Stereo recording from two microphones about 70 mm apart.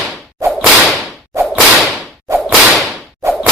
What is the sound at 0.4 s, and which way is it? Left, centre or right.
Whip, centre.